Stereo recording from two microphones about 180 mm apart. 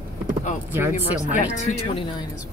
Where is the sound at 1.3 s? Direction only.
40° left (ahead or behind).